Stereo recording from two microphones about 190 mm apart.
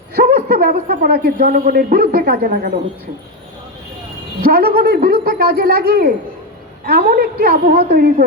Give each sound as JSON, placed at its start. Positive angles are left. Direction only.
{"t": 0.1, "sound": "a man's voice", "side_deg": -50}
{"t": 4.4, "sound": "a man's voice", "side_deg": -50}